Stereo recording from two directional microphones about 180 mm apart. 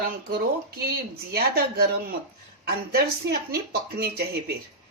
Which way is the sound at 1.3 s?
60° right (ahead or behind).